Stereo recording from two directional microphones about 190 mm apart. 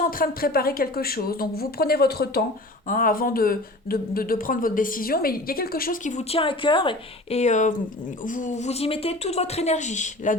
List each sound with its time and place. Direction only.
0.0 s speech: 50° left (ahead or behind)
2.8 s a woman's voice: 45° left (ahead or behind)